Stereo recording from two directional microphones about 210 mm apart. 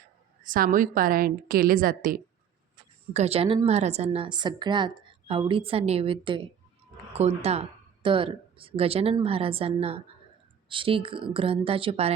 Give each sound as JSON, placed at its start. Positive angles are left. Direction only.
{"t": 0.4, "sound": "a woman's voice", "side_deg": -40}
{"t": 3.1, "sound": "a woman's voice", "side_deg": -30}